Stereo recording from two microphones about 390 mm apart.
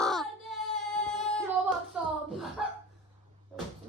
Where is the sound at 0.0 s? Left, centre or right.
Centre.